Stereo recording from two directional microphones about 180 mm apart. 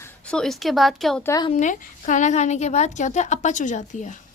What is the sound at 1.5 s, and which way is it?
A woman's voice, 45° left (ahead or behind).